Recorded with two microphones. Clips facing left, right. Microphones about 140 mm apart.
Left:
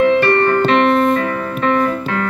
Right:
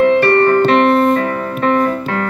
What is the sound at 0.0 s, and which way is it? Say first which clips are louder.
Music: right 2 dB; 45° right (ahead or behind).